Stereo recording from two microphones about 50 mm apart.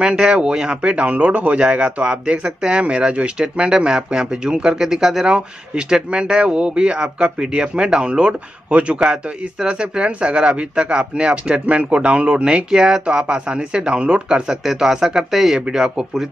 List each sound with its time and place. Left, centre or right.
0.0 s speech: centre
14.5 s speech: centre